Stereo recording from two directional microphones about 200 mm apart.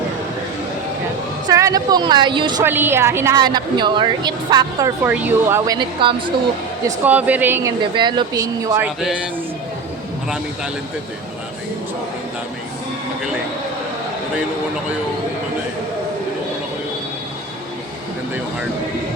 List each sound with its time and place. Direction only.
1.5 s a woman's voice: 15° right (ahead or behind)
5.0 s speech: 10° right (ahead or behind)
6.8 s speech: 10° right (ahead or behind)
7.9 s speech: 20° right (ahead or behind)